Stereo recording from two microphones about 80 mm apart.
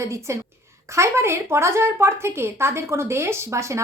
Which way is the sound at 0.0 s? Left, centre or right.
Right.